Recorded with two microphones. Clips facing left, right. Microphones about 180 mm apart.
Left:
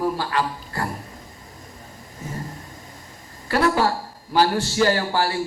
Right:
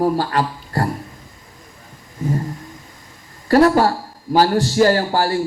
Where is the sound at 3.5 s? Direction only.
40° right (ahead or behind).